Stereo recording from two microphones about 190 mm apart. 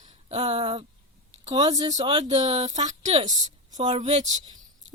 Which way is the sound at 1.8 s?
30° right (ahead or behind).